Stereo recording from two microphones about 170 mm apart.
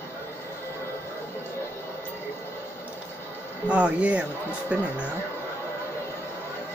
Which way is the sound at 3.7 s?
5° right (ahead or behind).